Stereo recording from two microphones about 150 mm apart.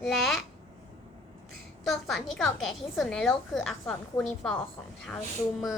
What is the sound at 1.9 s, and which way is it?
A woman's voice, centre (ahead or behind).